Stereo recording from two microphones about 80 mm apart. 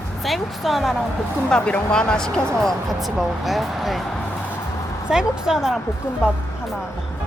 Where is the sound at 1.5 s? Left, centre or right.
Centre.